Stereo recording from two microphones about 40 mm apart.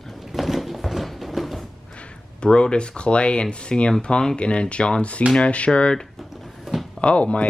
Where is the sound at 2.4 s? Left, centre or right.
Left.